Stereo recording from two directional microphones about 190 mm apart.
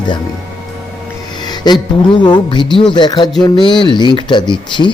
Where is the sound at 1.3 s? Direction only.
20° left (ahead or behind).